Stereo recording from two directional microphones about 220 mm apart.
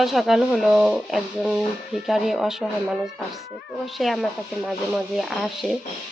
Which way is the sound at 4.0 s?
Centre (ahead or behind).